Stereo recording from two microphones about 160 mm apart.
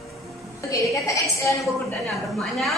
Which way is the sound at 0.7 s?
20° left (ahead or behind).